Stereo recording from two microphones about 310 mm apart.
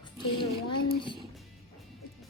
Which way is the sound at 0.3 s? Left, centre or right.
Centre.